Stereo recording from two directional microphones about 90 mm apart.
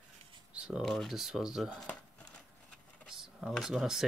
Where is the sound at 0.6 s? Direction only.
10° right (ahead or behind).